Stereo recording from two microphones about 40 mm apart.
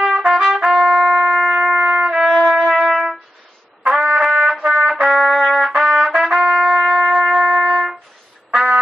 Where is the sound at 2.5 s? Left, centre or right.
Right.